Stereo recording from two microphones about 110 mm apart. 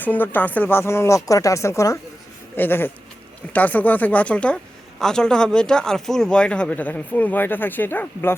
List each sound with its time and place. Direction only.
0.0 s speech: 15° left (ahead or behind)